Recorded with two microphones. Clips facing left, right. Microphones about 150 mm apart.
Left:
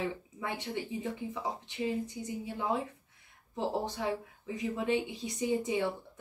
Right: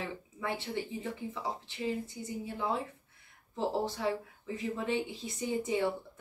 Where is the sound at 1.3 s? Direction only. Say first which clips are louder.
Left 1 dB; 15° left (ahead or behind).